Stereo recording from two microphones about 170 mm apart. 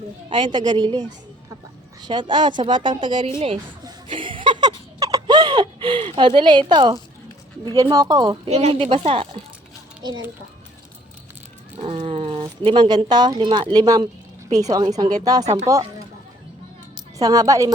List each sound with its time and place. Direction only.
0.3 s speech: 30° right (ahead or behind)
3.8 s a sound: 30° right (ahead or behind)
7.8 s speech: 20° right (ahead or behind)
8.4 s speech: 35° right (ahead or behind)
11.8 s speech: 35° right (ahead or behind); by 16.0 s 20° right (ahead or behind)
17.2 s speech: 20° right (ahead or behind)